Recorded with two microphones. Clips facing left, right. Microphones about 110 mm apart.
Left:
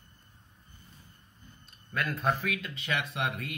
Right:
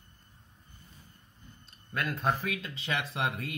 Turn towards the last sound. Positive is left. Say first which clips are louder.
# right 1 dB
turn(degrees=-30)  # may be behind; listen again after turning